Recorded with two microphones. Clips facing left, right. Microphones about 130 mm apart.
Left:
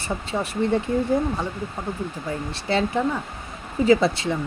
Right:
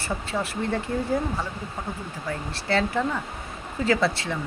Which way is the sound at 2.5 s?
15° left (ahead or behind).